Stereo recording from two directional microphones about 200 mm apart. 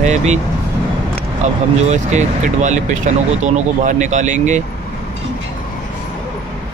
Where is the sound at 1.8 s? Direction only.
35° right (ahead or behind).